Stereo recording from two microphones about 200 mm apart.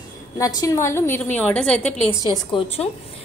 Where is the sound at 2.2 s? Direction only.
25° left (ahead or behind).